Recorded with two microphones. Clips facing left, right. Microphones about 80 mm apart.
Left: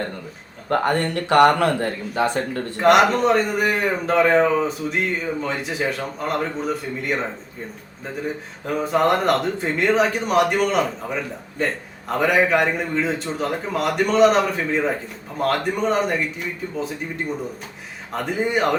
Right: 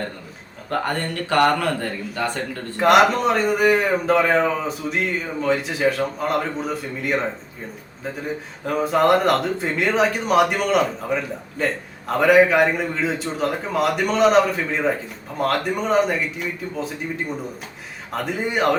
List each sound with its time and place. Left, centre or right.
0.7 s speech: left
2.8 s speech: centre
8.6 s speech: centre